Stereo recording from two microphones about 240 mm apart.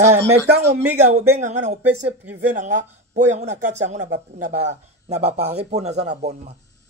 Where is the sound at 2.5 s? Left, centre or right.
Right.